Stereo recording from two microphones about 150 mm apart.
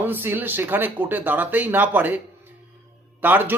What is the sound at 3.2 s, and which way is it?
Speech, 10° right (ahead or behind).